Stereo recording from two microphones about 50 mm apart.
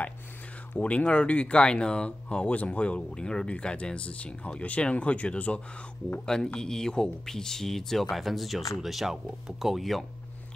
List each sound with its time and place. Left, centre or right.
0.7 s speech: left
6.2 s speech: centre